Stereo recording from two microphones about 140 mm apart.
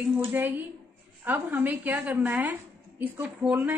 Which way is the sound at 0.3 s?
15° right (ahead or behind).